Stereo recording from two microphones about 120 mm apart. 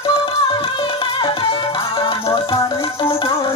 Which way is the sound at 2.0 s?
50° left (ahead or behind).